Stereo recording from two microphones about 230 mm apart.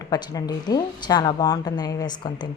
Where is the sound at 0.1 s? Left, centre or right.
Centre.